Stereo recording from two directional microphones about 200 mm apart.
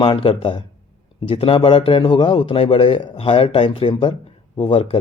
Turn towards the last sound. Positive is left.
turn(degrees=25)  # may be behind; listen again after turning